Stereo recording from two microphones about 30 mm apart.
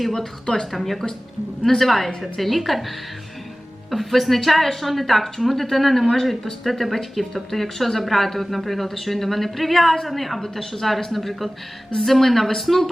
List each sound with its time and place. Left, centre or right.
0.0 s speech: centre
0.4 s speech: left
0.7 s speech: centre
3.9 s speech: centre